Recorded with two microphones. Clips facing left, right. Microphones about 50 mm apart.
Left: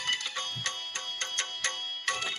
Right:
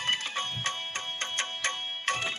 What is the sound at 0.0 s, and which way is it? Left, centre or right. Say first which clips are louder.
Music: right 2 dB; right.